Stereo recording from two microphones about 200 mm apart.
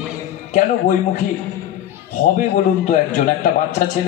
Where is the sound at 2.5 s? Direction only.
40° left (ahead or behind).